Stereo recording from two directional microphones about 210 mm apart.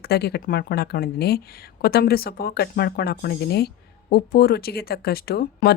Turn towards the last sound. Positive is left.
turn(degrees=45)  # may be behind; listen again after turning